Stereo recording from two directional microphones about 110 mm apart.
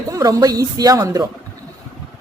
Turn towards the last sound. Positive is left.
turn(degrees=-35)  # may be behind; listen again after turning